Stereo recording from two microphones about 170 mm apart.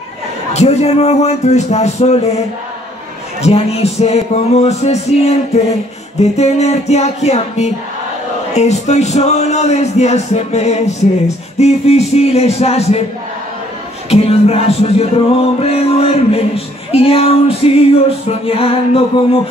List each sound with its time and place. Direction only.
0.5 s music: 40° left (ahead or behind)
3.4 s music: 35° left (ahead or behind)
14.0 s music: 35° left (ahead or behind)